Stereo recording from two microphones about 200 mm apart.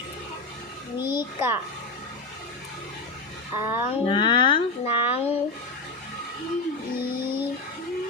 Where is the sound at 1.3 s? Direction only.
10° right (ahead or behind).